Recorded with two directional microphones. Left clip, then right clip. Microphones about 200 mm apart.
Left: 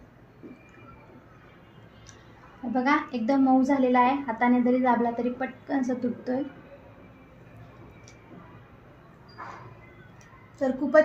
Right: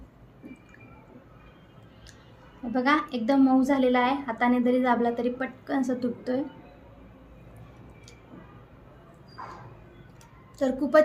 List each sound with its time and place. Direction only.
2.7 s a woman's voice: 5° left (ahead or behind)
10.6 s a woman's voice: 5° right (ahead or behind)